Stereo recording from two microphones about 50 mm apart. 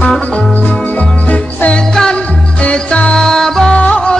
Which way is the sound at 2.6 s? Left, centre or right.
Left.